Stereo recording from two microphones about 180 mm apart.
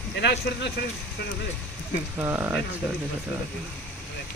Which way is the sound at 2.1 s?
15° right (ahead or behind).